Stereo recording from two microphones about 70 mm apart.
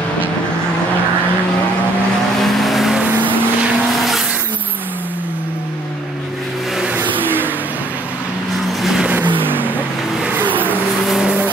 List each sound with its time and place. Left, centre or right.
2.3 s vehicle: centre
3.1 s vehicle: right
7.0 s a sound: right
9.0 s vehicle: right
11.1 s vehicle: centre